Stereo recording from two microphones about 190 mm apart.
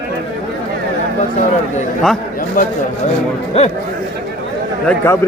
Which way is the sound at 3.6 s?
35° left (ahead or behind).